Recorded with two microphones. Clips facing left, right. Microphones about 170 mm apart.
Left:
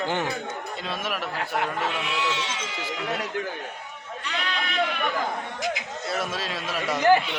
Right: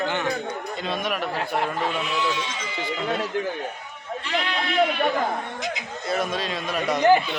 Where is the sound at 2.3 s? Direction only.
80° left.